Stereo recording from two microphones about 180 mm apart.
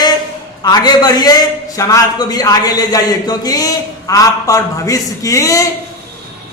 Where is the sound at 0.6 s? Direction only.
25° left (ahead or behind).